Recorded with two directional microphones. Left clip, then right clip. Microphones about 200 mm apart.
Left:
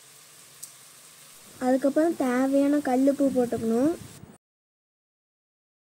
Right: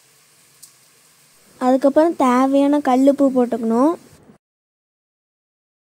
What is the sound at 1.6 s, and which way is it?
A woman's voice, 40° right (ahead or behind).